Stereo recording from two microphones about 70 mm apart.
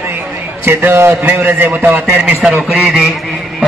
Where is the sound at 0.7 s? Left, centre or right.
Right.